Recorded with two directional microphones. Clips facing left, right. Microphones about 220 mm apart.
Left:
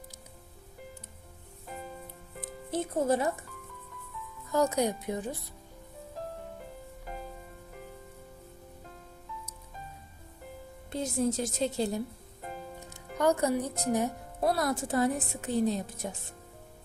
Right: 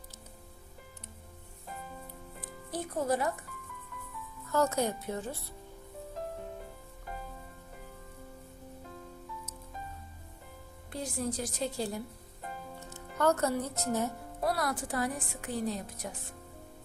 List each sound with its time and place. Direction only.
2.6 s speech: 25° left (ahead or behind)
4.5 s a woman's voice: 15° left (ahead or behind)
10.9 s speech: 25° left (ahead or behind)
13.1 s speech: 15° left (ahead or behind)